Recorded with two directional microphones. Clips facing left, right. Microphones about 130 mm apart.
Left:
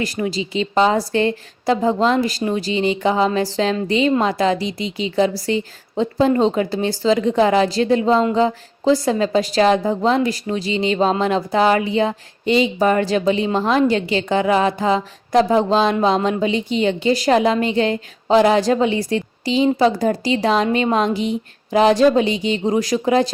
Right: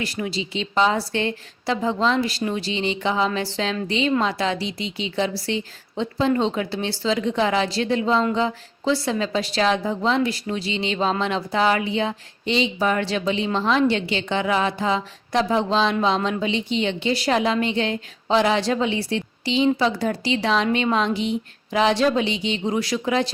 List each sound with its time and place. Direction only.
0.0 s speech: 40° left (ahead or behind)
15.5 s a sound: 45° left (ahead or behind)
16.4 s speech: 45° left (ahead or behind)